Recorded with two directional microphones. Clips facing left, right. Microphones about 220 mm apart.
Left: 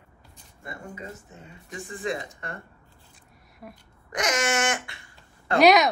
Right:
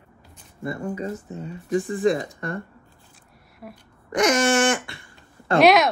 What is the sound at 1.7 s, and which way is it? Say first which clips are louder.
Speech: right 11 dB; 40° right (ahead or behind).